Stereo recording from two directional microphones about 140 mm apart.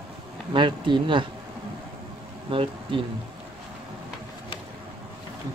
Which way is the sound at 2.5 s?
40° right (ahead or behind).